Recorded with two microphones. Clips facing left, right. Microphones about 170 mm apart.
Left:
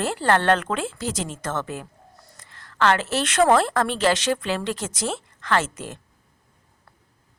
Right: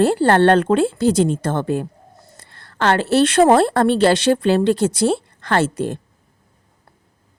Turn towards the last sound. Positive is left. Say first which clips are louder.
# right 6 dB
turn(degrees=-35)  # may be behind; listen again after turning